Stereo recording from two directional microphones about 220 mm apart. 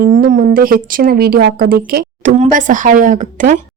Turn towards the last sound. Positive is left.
turn(degrees=-35)  # may be behind; listen again after turning